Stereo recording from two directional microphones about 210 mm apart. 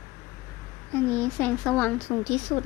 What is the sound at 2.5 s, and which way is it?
Speech, 25° left (ahead or behind).